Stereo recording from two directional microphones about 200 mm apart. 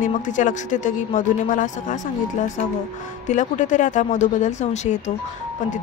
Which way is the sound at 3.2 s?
40° left (ahead or behind).